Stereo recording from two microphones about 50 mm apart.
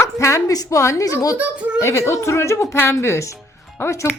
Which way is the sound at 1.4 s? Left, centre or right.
Right.